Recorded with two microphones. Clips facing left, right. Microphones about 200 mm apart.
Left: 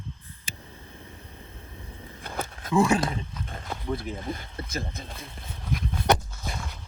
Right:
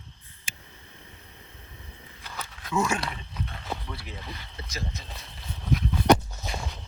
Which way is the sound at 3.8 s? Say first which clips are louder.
Left 9 dB; 50° left (ahead or behind).